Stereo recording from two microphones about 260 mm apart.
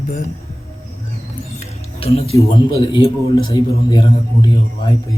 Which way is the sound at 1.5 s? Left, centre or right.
Left.